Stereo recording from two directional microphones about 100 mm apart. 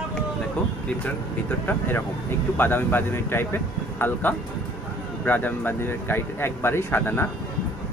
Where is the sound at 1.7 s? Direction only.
20° left (ahead or behind).